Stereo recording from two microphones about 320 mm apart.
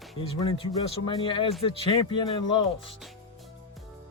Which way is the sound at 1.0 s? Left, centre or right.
Centre.